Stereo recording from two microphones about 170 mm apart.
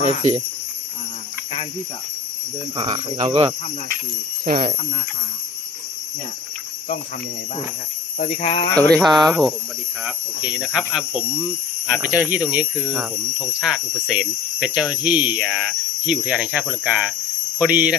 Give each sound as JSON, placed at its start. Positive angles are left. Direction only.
{"t": 2.7, "sound": "speech", "side_deg": -30}
{"t": 8.3, "sound": "speech", "side_deg": 35}
{"t": 8.7, "sound": "speech", "side_deg": 5}